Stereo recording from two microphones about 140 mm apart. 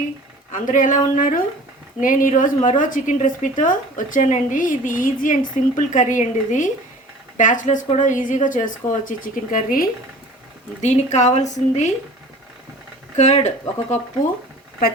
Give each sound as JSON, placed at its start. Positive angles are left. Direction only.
{"t": 0.5, "sound": "a woman's voice", "side_deg": 70}
{"t": 10.8, "sound": "a woman's voice", "side_deg": 55}
{"t": 13.1, "sound": "a woman's voice", "side_deg": 55}